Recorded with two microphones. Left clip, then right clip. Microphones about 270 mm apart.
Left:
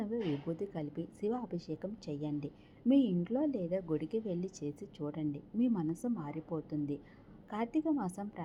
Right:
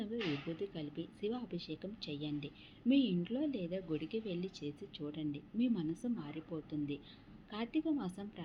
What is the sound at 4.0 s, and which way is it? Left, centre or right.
Speech, left.